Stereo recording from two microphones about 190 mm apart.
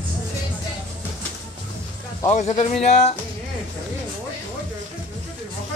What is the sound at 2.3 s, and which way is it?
Speech, 35° left (ahead or behind).